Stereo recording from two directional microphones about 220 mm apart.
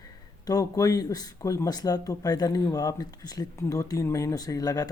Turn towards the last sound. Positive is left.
turn(degrees=15)  # may be behind; listen again after turning